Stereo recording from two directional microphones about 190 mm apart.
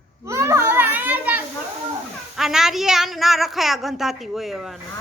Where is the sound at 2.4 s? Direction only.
Centre (ahead or behind).